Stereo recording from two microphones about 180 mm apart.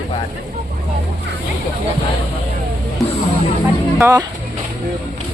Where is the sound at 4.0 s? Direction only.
15° right (ahead or behind).